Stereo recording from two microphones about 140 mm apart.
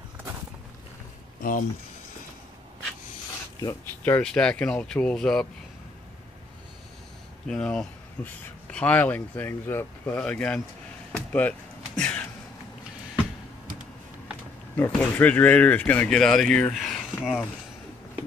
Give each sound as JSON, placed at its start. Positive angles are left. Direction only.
{"t": 1.4, "sound": "speech", "side_deg": 90}
{"t": 4.0, "sound": "speech", "side_deg": 10}
{"t": 7.4, "sound": "speech", "side_deg": 5}
{"t": 11.1, "sound": "a sound", "side_deg": 10}
{"t": 14.8, "sound": "speech", "side_deg": 15}